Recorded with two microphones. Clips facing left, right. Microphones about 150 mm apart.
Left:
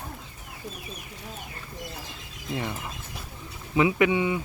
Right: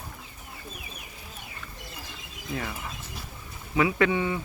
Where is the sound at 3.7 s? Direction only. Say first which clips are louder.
Left 2 dB; 20° left (ahead or behind).